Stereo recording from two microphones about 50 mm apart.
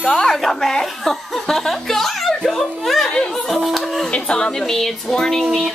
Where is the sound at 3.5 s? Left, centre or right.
Centre.